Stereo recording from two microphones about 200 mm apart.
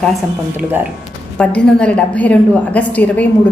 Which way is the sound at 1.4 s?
5° left (ahead or behind).